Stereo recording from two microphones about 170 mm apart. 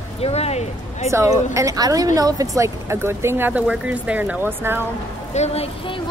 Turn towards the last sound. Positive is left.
turn(degrees=35)  # may be behind; listen again after turning